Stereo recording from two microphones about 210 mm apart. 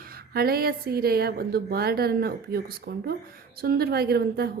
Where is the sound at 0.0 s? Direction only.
45° right (ahead or behind).